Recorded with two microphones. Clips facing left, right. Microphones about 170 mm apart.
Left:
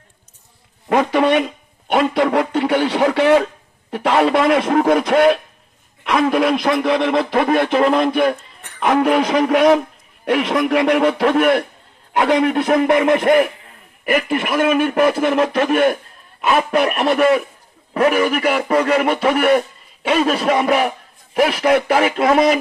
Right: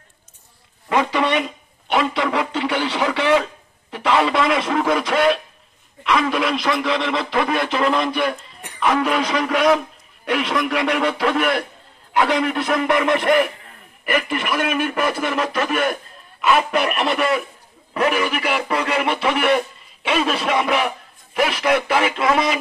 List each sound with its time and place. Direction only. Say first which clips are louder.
0.8 s a man's voice: left 4 dB; 50° left (ahead or behind)